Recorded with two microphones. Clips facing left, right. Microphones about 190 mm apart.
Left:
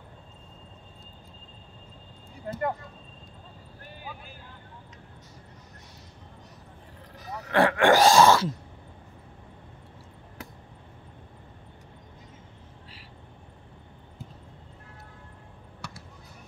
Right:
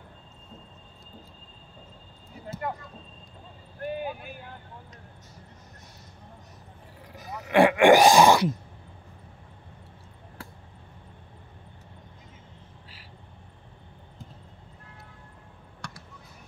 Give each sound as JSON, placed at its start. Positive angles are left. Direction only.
{"t": 2.5, "sound": "speech", "side_deg": 55}
{"t": 3.8, "sound": "vehicle", "side_deg": -60}
{"t": 7.4, "sound": "groan", "side_deg": -15}
{"t": 15.8, "sound": "basketball bounce", "side_deg": 5}